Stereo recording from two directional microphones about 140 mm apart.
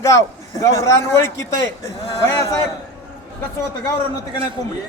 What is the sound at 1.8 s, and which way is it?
Speech, 20° left (ahead or behind).